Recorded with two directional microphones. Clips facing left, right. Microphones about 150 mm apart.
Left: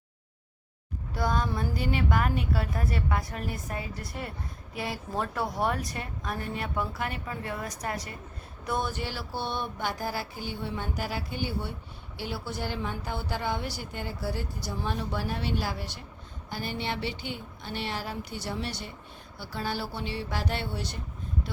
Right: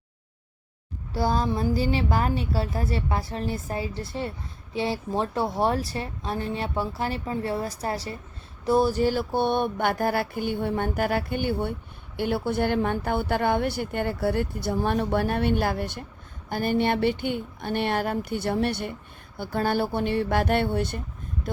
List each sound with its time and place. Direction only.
1.1 s a woman's voice: 30° right (ahead or behind); by 21.0 s 55° right (ahead or behind)